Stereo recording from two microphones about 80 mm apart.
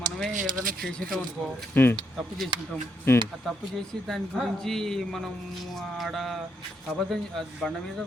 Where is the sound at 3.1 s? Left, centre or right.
Left.